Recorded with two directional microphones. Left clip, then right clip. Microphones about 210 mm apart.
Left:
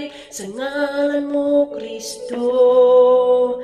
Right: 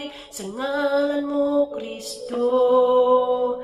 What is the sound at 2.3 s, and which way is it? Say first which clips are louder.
Music: left 4 dB; 25° left (ahead or behind).